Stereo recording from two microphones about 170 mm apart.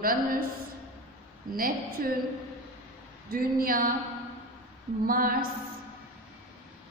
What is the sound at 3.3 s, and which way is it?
Speech, 60° right (ahead or behind).